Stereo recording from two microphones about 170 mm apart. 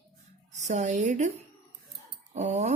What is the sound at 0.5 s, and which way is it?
Speech, 45° right (ahead or behind).